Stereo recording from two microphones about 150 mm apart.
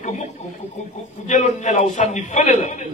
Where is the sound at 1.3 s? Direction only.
55° left (ahead or behind).